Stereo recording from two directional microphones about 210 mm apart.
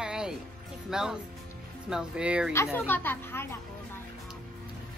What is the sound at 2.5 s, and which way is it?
Speech, 10° left (ahead or behind).